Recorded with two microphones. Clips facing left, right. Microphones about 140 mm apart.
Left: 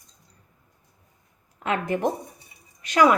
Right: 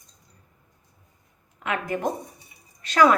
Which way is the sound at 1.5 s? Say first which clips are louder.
Left 2 dB; 30° left (ahead or behind).